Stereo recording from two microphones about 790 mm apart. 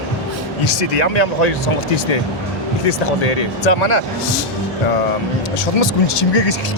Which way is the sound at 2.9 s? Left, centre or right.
Left.